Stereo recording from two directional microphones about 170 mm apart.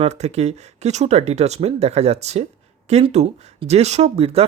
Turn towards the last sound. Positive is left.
turn(degrees=-35)  # may be behind; listen again after turning